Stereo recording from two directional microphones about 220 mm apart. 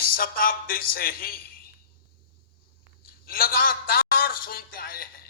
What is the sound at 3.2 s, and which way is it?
A man's voice, 40° left (ahead or behind).